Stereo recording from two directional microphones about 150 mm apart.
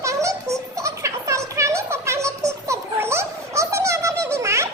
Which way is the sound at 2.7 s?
20° right (ahead or behind).